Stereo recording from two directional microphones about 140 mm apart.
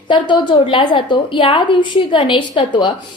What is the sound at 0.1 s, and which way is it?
A woman's voice, 35° left (ahead or behind).